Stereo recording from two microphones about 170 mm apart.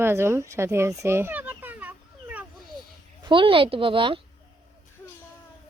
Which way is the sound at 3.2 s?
30° right (ahead or behind).